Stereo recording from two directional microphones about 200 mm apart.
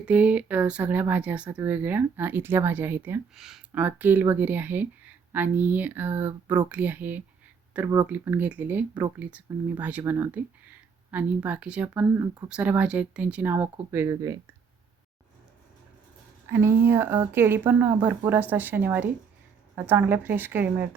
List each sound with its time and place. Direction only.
0.0 s speech: 5° right (ahead or behind)
16.5 s speech: 10° right (ahead or behind)